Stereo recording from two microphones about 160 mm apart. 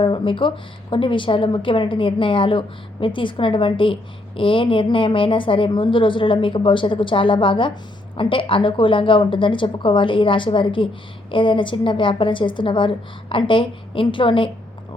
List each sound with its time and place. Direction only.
0.0 s a woman's voice: 30° left (ahead or behind)